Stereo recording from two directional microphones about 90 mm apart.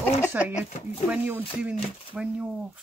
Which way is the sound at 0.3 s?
20° right (ahead or behind).